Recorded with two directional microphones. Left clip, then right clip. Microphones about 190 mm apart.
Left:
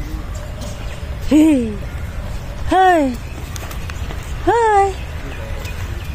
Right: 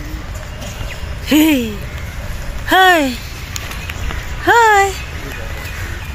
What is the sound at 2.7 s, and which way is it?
Speech, 10° left (ahead or behind).